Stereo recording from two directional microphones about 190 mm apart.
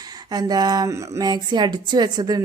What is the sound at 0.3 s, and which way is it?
Speech, 20° right (ahead or behind).